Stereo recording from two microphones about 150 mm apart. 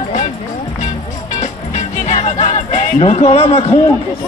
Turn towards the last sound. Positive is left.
turn(degrees=40)  # may be behind; listen again after turning